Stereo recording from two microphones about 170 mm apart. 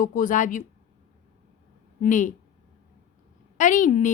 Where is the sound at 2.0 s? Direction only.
50° left (ahead or behind).